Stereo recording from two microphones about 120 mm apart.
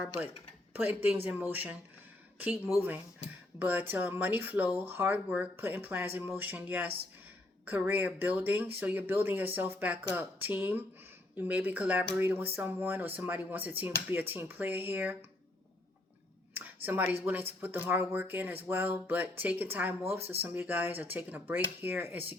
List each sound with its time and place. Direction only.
0.7 s speech: 15° right (ahead or behind)
16.6 s a sound: 15° right (ahead or behind)
17.2 s speech: 15° right (ahead or behind)